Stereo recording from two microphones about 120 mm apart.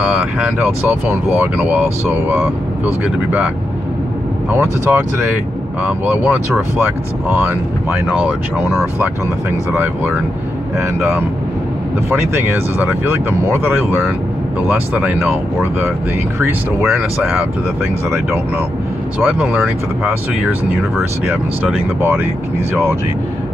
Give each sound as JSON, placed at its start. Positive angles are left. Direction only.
{"t": 0.0, "sound": "speech", "side_deg": -10}
{"t": 4.5, "sound": "speech", "side_deg": -20}
{"t": 12.1, "sound": "speech", "side_deg": -20}
{"t": 19.1, "sound": "speech", "side_deg": -10}
{"t": 22.0, "sound": "speech", "side_deg": -15}